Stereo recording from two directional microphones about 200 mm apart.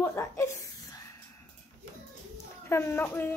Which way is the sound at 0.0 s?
15° left (ahead or behind).